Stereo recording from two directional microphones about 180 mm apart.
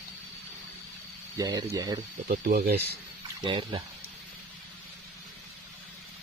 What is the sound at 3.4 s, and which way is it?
Speech, 25° right (ahead or behind).